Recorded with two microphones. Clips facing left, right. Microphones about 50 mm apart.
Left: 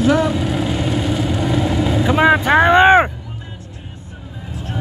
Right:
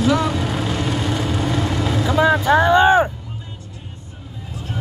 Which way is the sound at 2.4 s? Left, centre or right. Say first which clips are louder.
Left 2 dB; left.